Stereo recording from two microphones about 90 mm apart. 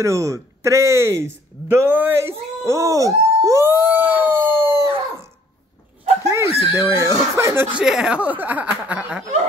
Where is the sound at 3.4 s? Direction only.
30° right (ahead or behind).